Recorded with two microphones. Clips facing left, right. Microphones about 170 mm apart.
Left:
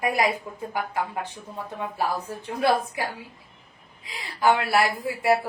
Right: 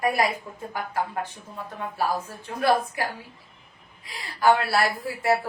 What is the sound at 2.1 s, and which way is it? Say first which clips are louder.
Speech: even; 20° left (ahead or behind).